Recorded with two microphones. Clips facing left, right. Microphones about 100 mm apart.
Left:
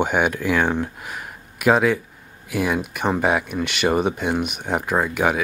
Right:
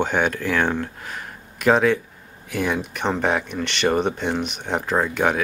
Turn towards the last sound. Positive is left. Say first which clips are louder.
# even
turn(degrees=5)  # may be behind; listen again after turning